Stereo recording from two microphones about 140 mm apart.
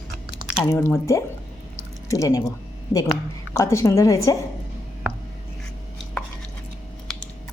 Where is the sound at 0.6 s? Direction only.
20° left (ahead or behind).